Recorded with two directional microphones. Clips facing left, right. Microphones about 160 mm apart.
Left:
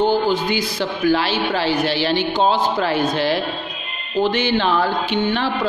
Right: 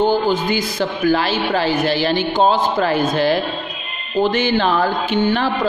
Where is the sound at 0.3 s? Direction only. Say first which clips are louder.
Right 1 dB; 45° right (ahead or behind).